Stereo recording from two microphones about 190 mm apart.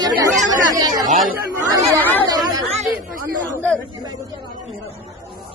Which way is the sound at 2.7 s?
35° right (ahead or behind).